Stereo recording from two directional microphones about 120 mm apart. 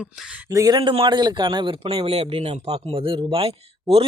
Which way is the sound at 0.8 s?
45° right (ahead or behind).